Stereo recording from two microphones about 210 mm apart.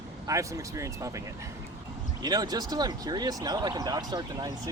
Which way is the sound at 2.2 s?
20° right (ahead or behind).